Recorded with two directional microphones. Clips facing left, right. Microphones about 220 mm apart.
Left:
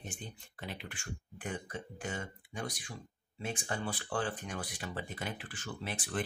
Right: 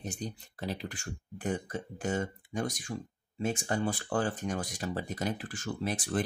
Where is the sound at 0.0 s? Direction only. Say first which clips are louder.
Right 8 dB; 40° right (ahead or behind).